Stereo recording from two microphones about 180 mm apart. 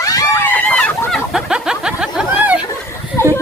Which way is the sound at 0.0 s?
20° left (ahead or behind).